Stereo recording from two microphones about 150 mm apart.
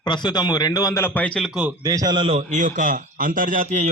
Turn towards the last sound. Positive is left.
turn(degrees=-50)  # may be behind; listen again after turning